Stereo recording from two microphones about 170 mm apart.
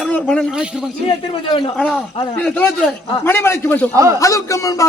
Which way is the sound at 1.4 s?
30° left (ahead or behind).